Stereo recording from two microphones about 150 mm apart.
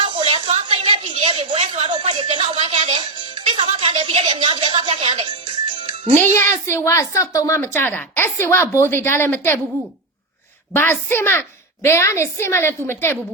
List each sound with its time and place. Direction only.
0.0 s a sound: 35° right (ahead or behind)
2.3 s music: 35° right (ahead or behind)
6.4 s a woman's voice: 15° left (ahead or behind)
10.8 s a woman's voice: 15° left (ahead or behind)